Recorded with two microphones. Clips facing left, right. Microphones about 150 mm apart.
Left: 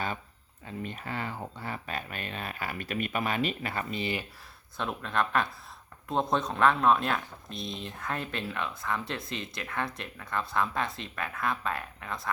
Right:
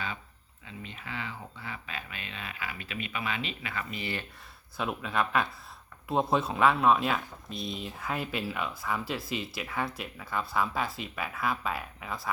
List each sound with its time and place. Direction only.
0.6 s speech: 50° left (ahead or behind)
3.9 s speech: 20° left (ahead or behind)
4.8 s speech: 5° right (ahead or behind)